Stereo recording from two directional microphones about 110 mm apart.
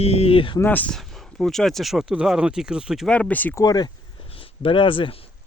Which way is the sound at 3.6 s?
35° left (ahead or behind).